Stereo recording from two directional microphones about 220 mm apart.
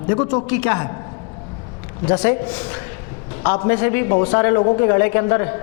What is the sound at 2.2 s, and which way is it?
A man's voice, 10° left (ahead or behind).